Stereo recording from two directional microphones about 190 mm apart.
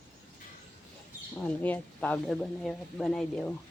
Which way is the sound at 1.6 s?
10° left (ahead or behind).